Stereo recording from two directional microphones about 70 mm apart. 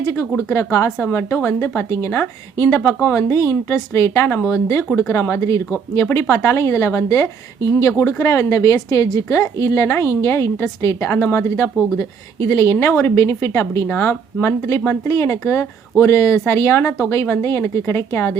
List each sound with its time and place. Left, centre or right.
0.0 s a woman's voice: left